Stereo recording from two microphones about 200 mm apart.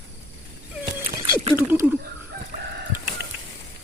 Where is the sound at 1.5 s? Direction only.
10° right (ahead or behind).